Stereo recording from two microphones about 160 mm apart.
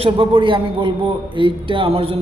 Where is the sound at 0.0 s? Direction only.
35° right (ahead or behind).